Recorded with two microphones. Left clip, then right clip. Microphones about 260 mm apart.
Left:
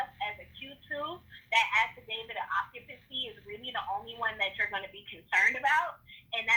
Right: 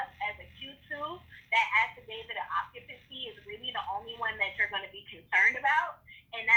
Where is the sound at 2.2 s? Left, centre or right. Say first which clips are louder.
Even; left.